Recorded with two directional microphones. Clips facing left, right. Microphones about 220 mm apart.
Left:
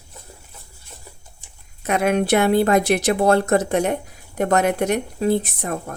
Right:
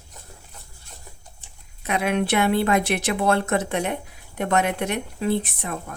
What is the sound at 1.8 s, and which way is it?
A woman's voice, 45° left (ahead or behind).